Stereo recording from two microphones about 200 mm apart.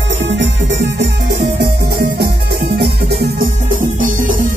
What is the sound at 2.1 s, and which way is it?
Music, 50° right (ahead or behind).